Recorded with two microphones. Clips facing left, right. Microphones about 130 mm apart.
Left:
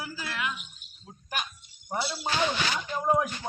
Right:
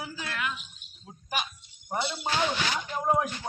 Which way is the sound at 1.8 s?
5° left (ahead or behind).